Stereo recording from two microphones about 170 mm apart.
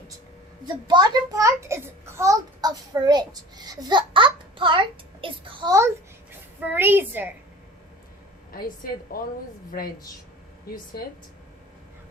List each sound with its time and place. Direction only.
0.6 s a child's voice: 25° right (ahead or behind)
6.7 s a woman's voice: 10° right (ahead or behind)
8.5 s a woman's voice: 60° left (ahead or behind)